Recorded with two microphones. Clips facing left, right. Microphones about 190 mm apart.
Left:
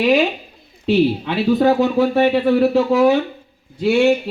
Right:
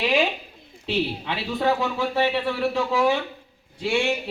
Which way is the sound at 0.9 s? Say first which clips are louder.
Left 10 dB; 45° left (ahead or behind).